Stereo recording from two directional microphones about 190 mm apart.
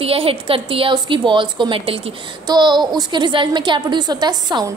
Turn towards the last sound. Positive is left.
turn(degrees=-20)  # may be behind; listen again after turning